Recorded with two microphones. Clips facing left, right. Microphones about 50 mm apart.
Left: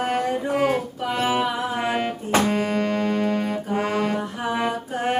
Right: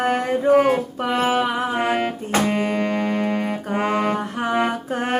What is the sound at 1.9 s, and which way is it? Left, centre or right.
Music, centre.